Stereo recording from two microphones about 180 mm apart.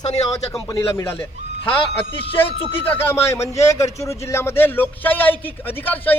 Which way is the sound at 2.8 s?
10° left (ahead or behind).